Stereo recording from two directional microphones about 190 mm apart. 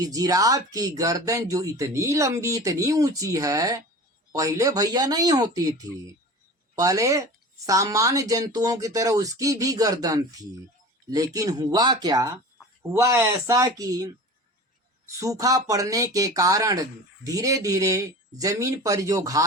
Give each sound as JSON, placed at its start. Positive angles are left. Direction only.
{"t": 0.0, "sound": "speech", "side_deg": -20}